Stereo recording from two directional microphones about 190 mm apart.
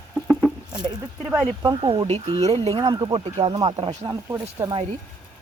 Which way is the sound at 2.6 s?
25° right (ahead or behind).